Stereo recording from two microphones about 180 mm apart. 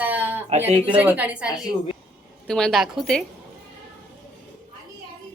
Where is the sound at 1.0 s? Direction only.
10° right (ahead or behind).